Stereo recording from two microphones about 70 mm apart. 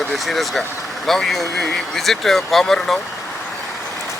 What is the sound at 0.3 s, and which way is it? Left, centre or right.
Speech, centre.